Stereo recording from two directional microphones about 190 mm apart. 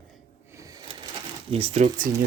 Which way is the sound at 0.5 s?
15° right (ahead or behind).